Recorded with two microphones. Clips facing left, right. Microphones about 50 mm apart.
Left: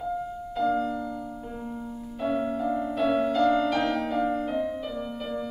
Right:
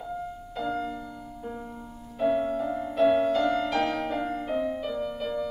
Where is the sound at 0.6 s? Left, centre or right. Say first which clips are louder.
Left 5 dB; centre.